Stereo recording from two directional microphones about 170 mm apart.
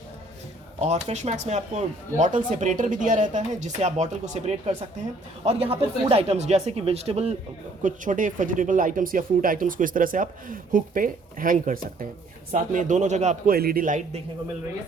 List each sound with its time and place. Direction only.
0.8 s speech: 40° right (ahead or behind)
7.8 s speech: 50° right (ahead or behind)
13.5 s a man's voice: 60° right (ahead or behind)